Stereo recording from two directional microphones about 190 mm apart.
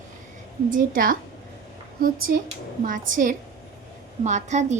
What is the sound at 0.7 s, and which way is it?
Speech, 45° right (ahead or behind).